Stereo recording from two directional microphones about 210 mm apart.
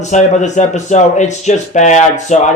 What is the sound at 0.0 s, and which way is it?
A man's voice, 35° left (ahead or behind).